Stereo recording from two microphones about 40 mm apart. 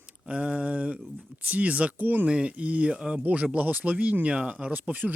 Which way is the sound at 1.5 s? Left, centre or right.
Right.